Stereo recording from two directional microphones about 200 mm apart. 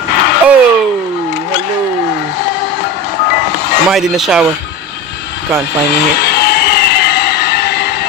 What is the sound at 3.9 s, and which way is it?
Speech, centre (ahead or behind).